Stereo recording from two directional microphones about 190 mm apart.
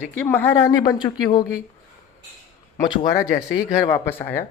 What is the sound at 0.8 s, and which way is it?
Speech, 25° left (ahead or behind).